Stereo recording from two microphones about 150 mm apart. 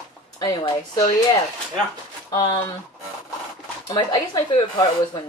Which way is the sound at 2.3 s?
25° left (ahead or behind).